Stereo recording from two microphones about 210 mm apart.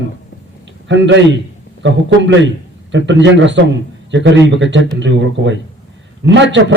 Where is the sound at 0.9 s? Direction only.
60° right (ahead or behind).